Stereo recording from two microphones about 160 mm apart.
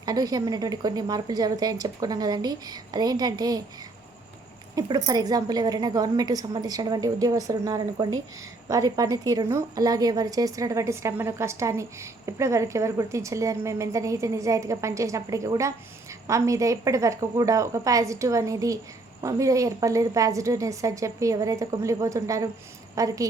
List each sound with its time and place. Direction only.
0.0 s a woman's voice: 25° right (ahead or behind)
4.7 s a woman's voice: 20° right (ahead or behind)